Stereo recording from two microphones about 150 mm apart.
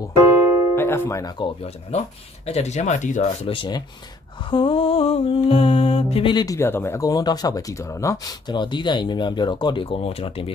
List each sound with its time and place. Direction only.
0.7 s speech: 15° left (ahead or behind)
1.4 s speech: 45° left (ahead or behind)
3.4 s music: 30° left (ahead or behind)